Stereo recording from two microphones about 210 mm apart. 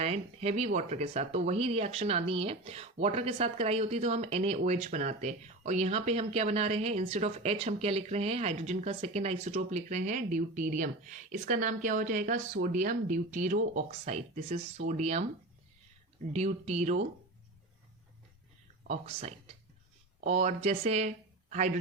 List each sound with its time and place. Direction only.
0.0 s speech: 30° right (ahead or behind)
16.3 s speech: 30° right (ahead or behind)
18.9 s speech: 30° right (ahead or behind)